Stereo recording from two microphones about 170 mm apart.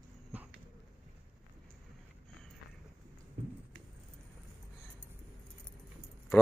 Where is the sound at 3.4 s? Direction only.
45° right (ahead or behind).